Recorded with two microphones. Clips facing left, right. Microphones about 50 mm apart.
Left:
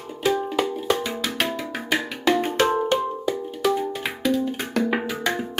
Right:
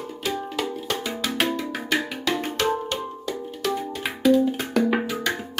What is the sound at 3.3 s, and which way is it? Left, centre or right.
Music, centre.